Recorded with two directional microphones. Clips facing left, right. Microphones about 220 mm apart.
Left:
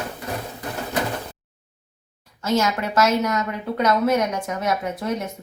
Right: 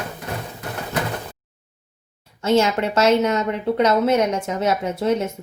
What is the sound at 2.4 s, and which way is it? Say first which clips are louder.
Speech: right 4 dB; 30° right (ahead or behind).